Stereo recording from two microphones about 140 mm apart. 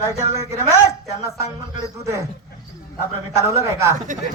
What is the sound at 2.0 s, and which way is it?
Speech, 20° right (ahead or behind).